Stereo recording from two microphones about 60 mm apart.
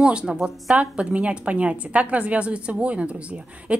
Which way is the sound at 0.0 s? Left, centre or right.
Centre.